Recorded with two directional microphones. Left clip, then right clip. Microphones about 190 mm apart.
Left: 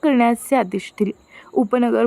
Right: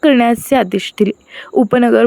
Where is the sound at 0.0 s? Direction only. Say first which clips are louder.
Right 6 dB; 20° right (ahead or behind).